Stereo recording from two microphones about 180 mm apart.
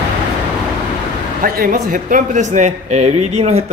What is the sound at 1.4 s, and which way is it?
Speech, 55° right (ahead or behind).